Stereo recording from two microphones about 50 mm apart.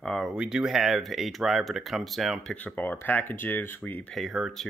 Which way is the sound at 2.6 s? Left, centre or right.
Left.